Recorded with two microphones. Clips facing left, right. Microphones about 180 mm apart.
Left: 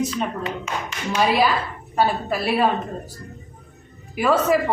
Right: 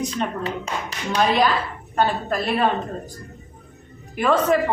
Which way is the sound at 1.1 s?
5° left (ahead or behind).